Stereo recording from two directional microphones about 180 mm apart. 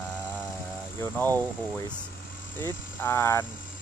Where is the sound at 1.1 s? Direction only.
10° left (ahead or behind).